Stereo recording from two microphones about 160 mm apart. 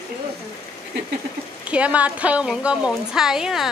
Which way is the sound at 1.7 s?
10° right (ahead or behind).